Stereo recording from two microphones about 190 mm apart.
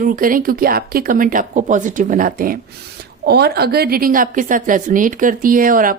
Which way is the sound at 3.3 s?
60° right (ahead or behind).